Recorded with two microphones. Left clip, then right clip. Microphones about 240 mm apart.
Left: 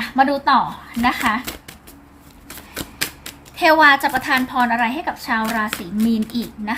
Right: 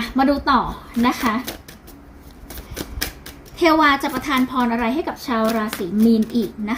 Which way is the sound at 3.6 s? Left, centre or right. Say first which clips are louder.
Left 3 dB; left.